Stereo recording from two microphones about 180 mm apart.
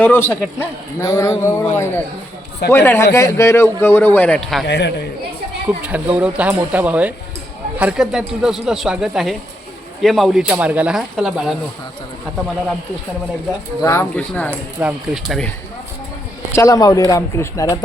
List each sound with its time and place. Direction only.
0.0 s a man's voice: 10° left (ahead or behind)
4.6 s speech: 70° left (ahead or behind)
5.8 s speech: 10° right (ahead or behind)
13.8 s a man's voice: 15° left (ahead or behind)
14.8 s speech: 5° right (ahead or behind)
16.5 s a man's voice: 15° left (ahead or behind)